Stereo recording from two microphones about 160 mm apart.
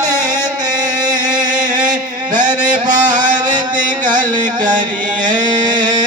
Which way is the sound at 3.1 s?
55° right (ahead or behind).